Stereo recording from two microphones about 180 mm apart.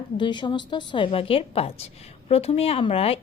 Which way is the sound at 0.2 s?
25° left (ahead or behind).